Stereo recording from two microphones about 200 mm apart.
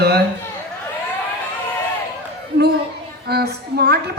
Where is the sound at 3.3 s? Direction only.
55° right (ahead or behind).